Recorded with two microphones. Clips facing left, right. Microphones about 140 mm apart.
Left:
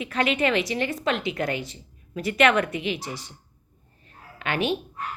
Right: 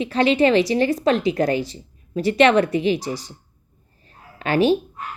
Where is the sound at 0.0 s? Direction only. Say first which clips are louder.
Right 7 dB; 30° right (ahead or behind).